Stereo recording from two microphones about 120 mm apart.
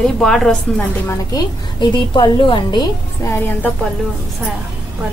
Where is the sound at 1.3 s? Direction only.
35° left (ahead or behind).